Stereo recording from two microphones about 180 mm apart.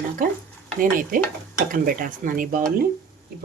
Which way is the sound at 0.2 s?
50° right (ahead or behind).